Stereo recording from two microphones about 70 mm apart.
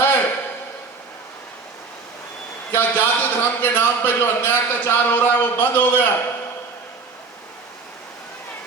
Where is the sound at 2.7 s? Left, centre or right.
Left.